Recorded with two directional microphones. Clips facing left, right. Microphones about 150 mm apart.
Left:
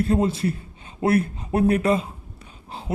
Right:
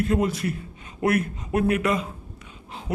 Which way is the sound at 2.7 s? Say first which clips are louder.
Left 2 dB; 35° left (ahead or behind).